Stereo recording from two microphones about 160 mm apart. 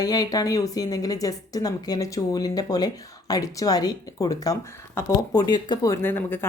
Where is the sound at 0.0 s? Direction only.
25° left (ahead or behind).